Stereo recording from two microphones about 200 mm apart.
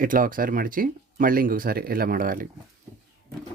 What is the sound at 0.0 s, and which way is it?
Speech, 45° right (ahead or behind).